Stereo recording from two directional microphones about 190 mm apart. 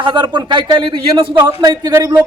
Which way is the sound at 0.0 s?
25° right (ahead or behind).